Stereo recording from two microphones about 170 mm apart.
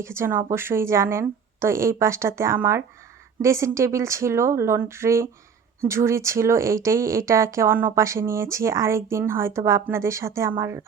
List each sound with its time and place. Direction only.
0.0 s speech: 15° right (ahead or behind)